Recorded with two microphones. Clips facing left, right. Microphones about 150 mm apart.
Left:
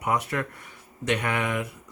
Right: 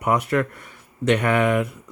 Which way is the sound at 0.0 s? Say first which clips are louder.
Right 6 dB; 60° right (ahead or behind).